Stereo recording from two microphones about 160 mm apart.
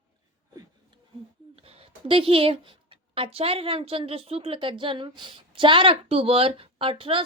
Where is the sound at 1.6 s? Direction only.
35° right (ahead or behind).